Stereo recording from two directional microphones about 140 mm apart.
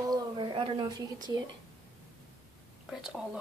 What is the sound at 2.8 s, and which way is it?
Speech, 5° right (ahead or behind).